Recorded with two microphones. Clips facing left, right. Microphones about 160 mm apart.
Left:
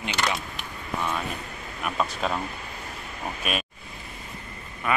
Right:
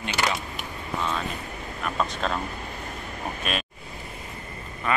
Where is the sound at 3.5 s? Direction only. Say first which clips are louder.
Left 1 dB; 10° left (ahead or behind).